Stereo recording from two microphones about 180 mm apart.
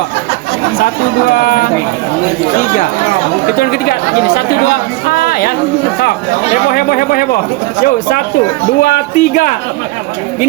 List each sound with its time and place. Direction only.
1.3 s speech: 50° left (ahead or behind)
3.6 s speech: 55° left (ahead or behind)
6.7 s speech: 55° left (ahead or behind)
8.8 s speech: 50° left (ahead or behind)